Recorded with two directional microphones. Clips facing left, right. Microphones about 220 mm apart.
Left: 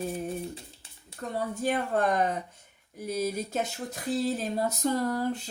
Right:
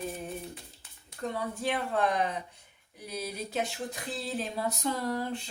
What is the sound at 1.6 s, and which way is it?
Speech, 45° left (ahead or behind).